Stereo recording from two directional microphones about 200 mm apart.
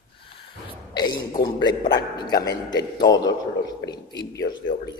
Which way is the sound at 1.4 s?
20° left (ahead or behind).